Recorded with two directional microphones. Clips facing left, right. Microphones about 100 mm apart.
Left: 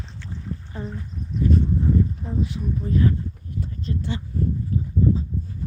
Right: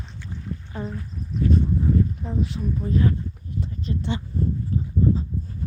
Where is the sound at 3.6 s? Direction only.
20° right (ahead or behind).